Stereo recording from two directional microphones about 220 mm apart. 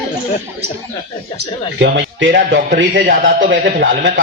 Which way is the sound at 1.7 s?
55° right (ahead or behind).